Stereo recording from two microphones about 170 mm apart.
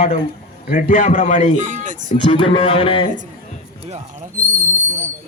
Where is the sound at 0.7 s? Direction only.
55° left (ahead or behind).